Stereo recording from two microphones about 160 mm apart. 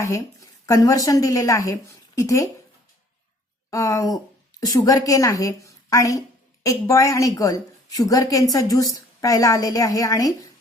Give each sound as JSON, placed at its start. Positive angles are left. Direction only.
{"t": 0.0, "sound": "a woman's voice", "side_deg": 20}
{"t": 3.7, "sound": "a woman's voice", "side_deg": 20}